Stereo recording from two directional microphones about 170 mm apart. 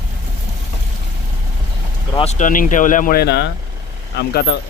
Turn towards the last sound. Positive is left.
turn(degrees=80)